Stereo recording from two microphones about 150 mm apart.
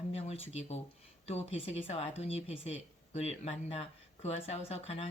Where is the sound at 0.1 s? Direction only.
40° left (ahead or behind).